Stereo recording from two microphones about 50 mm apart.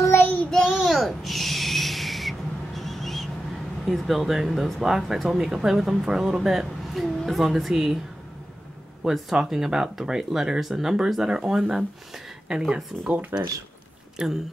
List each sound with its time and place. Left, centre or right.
0.5 s a sound: centre
3.8 s speech: centre
9.0 s speech: centre
13.3 s speech: right
14.1 s speech: centre